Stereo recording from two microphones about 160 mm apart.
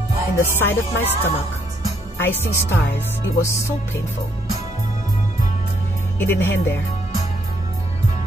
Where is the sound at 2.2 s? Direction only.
15° left (ahead or behind).